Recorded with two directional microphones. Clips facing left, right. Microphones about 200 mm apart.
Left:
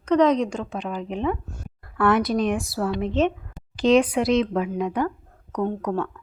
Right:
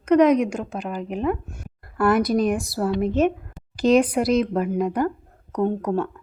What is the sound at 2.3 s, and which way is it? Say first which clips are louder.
Speech: right 2 dB; 40° right (ahead or behind).